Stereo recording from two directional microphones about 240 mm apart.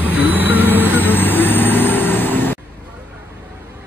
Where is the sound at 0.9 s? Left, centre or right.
Centre.